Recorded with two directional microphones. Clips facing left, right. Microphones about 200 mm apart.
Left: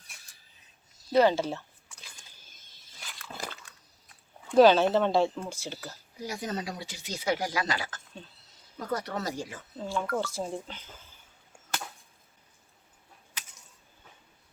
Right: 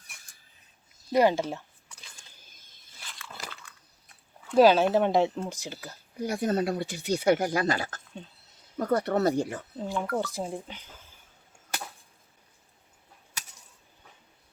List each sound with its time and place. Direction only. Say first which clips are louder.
1.1 s speech: even; 15° right (ahead or behind)
4.5 s speech: even; 10° right (ahead or behind)
5.7 s speech: right 2 dB; 55° right (ahead or behind)
9.7 s speech: even; 15° right (ahead or behind)